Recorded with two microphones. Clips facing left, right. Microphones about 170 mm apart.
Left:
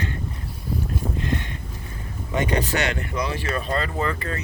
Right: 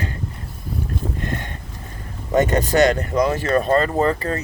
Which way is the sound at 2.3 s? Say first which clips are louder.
Right 6 dB; 45° right (ahead or behind).